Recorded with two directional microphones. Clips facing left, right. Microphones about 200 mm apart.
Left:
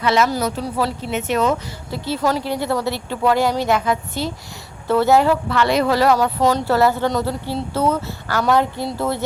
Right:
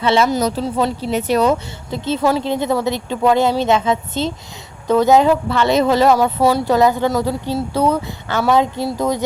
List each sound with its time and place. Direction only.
0.0 s speech: 30° right (ahead or behind)
1.1 s speech: 35° right (ahead or behind)
1.9 s speech: 20° right (ahead or behind)